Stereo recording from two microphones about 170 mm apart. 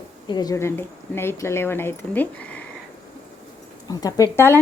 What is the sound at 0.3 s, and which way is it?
Speech, 20° left (ahead or behind).